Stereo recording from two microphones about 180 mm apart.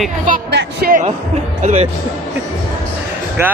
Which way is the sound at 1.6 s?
45° right (ahead or behind).